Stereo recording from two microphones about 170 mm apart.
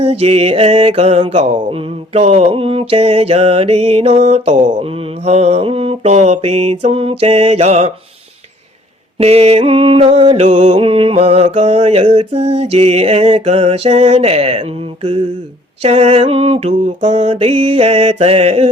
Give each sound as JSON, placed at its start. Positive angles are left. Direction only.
{"t": 0.0, "sound": "mantra", "side_deg": -35}
{"t": 9.1, "sound": "mantra", "side_deg": -35}